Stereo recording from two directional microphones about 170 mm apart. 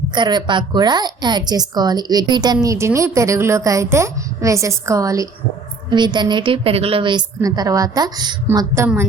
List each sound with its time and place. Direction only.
0.1 s a woman's voice: 25° right (ahead or behind)